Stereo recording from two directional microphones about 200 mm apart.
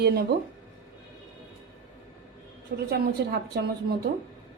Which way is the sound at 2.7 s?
60° right (ahead or behind).